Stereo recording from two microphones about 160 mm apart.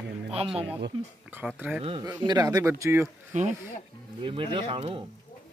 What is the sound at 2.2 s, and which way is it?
Speech, 25° right (ahead or behind).